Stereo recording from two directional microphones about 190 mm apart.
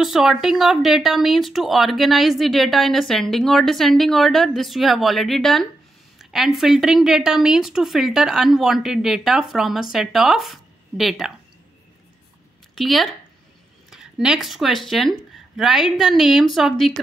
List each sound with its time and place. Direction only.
0.0 s speech: centre (ahead or behind)
12.7 s speech: centre (ahead or behind)